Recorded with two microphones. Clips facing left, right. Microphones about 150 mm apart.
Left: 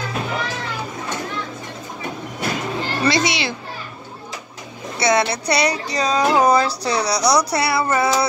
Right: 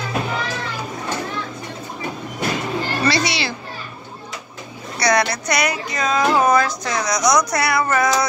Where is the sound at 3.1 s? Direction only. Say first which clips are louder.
Left 1 dB; 20° left (ahead or behind).